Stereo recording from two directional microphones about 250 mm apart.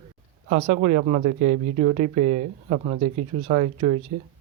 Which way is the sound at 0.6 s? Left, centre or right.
Right.